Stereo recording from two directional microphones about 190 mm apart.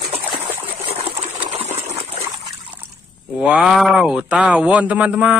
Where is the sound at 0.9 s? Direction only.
35° right (ahead or behind).